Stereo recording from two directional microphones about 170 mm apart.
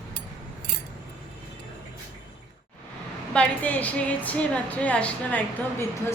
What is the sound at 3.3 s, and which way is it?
A woman's voice, 5° left (ahead or behind).